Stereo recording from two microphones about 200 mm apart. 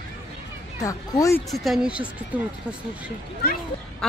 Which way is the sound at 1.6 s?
Centre (ahead or behind).